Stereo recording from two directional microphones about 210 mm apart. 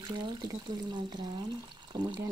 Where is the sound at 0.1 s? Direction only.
20° right (ahead or behind).